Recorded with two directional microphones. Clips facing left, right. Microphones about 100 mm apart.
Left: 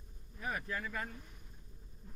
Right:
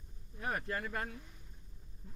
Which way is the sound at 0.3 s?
45° right (ahead or behind).